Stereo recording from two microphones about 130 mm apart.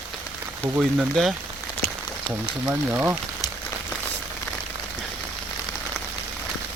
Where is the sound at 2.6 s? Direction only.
15° right (ahead or behind).